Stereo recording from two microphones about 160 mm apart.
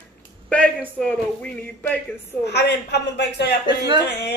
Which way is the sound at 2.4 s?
90° left.